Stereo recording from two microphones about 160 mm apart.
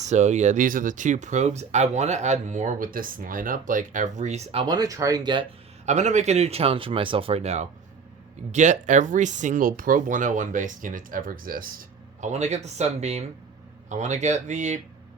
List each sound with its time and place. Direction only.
0.0 s speech: 45° right (ahead or behind)
4.6 s speech: 25° right (ahead or behind)
5.8 s a man's voice: 45° right (ahead or behind); by 12.3 s 65° right (ahead or behind)
12.3 s speech: 45° right (ahead or behind)